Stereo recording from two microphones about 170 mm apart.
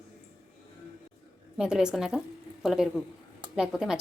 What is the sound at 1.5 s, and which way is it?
A woman's voice, 5° right (ahead or behind).